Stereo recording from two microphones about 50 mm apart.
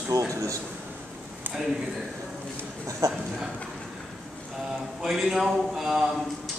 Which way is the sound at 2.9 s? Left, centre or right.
Right.